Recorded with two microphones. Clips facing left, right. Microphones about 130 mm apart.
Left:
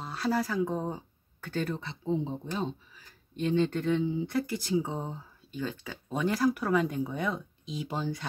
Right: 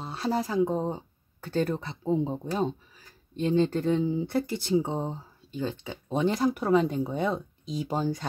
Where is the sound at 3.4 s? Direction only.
30° right (ahead or behind).